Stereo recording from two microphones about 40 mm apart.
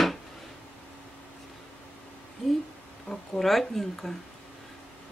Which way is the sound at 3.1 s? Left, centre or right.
Left.